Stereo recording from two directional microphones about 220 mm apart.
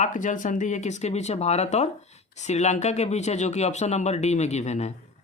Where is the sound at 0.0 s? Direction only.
35° left (ahead or behind).